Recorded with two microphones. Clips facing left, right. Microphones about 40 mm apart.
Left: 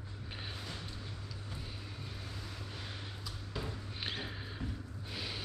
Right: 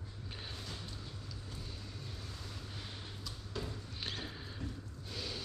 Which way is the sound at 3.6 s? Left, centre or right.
Centre.